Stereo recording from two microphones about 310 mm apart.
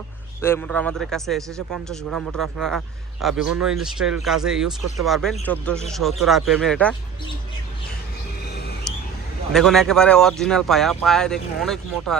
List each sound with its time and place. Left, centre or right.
0.4 s a man's voice: centre
8.4 s a sound: left
9.5 s a man's voice: centre